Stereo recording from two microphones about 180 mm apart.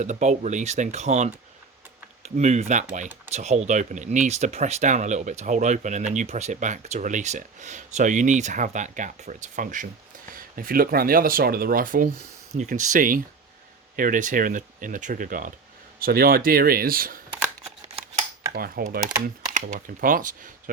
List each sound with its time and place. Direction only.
0.0 s speech: 40° right (ahead or behind)
17.8 s a sound: 35° right (ahead or behind)
18.5 s speech: 55° right (ahead or behind)